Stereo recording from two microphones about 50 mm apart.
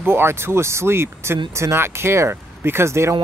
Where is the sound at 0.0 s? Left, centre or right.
Right.